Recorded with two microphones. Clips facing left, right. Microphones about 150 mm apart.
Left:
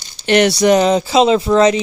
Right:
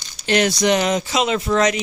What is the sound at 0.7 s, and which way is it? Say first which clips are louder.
Speech: left 6 dB; 35° left (ahead or behind).